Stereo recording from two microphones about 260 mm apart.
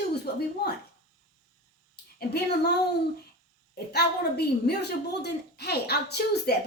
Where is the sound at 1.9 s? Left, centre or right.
Left.